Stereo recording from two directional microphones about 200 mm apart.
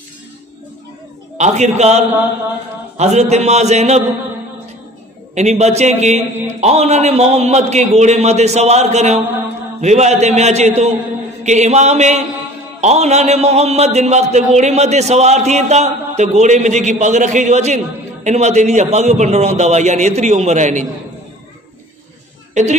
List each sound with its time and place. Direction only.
1.4 s a man's voice: 35° right (ahead or behind)
5.3 s a man's voice: 35° right (ahead or behind)
22.5 s a woman's voice: 35° right (ahead or behind)